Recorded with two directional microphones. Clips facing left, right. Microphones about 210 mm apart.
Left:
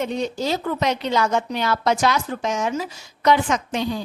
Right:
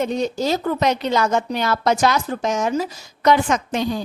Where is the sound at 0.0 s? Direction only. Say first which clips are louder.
Right 3 dB; 40° right (ahead or behind).